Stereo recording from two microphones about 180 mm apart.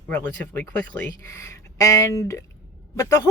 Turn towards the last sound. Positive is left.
turn(degrees=15)  # may be behind; listen again after turning